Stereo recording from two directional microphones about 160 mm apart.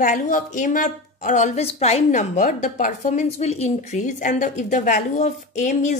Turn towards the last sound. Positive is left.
turn(degrees=50)  # may be behind; listen again after turning